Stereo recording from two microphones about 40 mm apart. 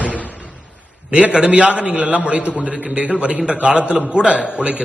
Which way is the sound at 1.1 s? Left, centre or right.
Right.